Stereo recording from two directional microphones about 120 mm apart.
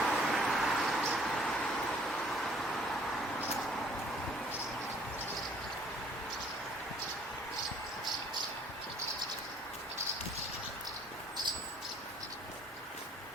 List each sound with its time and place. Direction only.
0.0 s vehicle: centre (ahead or behind)